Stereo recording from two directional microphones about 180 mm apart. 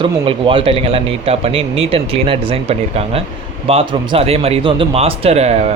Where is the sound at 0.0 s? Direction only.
30° right (ahead or behind).